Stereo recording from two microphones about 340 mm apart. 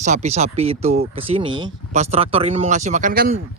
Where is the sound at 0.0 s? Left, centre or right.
Centre.